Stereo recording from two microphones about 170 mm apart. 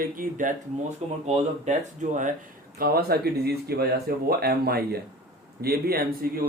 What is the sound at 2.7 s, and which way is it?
Speech, 60° right (ahead or behind).